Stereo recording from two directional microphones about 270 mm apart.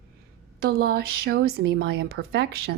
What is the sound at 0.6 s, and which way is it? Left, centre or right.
A woman's voice, right.